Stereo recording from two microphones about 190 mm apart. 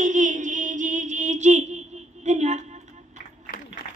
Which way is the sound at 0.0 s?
40° right (ahead or behind).